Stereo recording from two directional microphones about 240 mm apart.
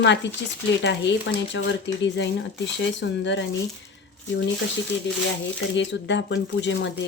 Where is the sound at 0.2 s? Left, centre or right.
Left.